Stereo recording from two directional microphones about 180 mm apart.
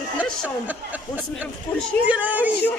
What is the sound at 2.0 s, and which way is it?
Speech, 10° right (ahead or behind).